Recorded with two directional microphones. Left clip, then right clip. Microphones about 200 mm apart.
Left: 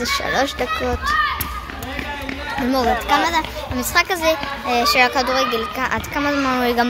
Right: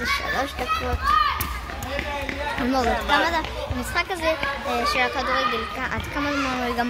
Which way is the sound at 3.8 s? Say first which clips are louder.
Left 8 dB; 30° left (ahead or behind).